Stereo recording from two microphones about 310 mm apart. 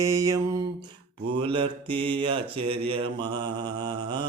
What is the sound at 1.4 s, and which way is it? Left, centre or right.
Mantra, centre.